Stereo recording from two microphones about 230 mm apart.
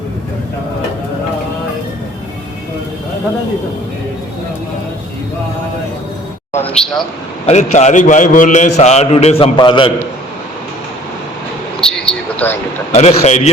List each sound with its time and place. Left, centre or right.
7.4 s a man's voice: left
11.8 s a sound: centre
12.9 s a man's voice: left